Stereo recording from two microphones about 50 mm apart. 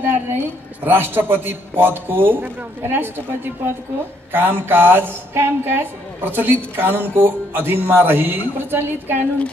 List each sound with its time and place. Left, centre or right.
0.0 s speech: right